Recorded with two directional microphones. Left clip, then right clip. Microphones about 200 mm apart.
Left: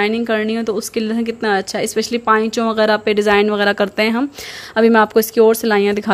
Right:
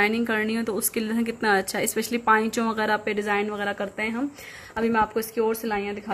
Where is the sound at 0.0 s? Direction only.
20° left (ahead or behind).